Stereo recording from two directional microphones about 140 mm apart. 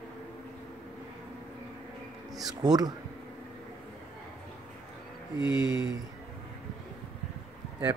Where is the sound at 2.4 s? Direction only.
25° right (ahead or behind).